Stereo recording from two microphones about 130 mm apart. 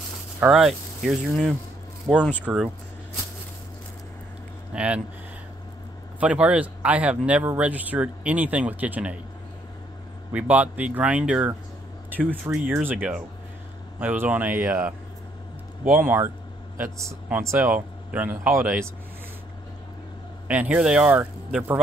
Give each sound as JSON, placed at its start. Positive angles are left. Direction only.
{"t": 0.4, "sound": "speech", "side_deg": -5}
{"t": 4.7, "sound": "speech", "side_deg": -10}
{"t": 6.1, "sound": "speech", "side_deg": -10}
{"t": 10.3, "sound": "speech", "side_deg": -10}
{"t": 16.0, "sound": "speech", "side_deg": -15}
{"t": 20.4, "sound": "speech", "side_deg": -10}